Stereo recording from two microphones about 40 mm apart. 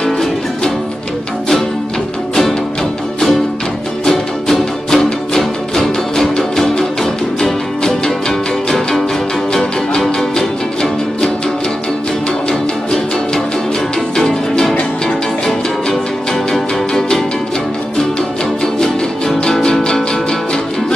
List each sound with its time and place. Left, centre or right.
4.0 s music: centre
6.3 s music: centre
12.4 s music: centre
14.5 s music: centre
18.8 s music: centre